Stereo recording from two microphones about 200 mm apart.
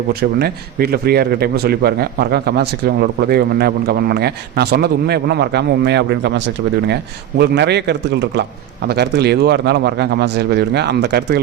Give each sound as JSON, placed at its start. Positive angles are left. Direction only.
{"t": 0.1, "sound": "speech", "side_deg": -50}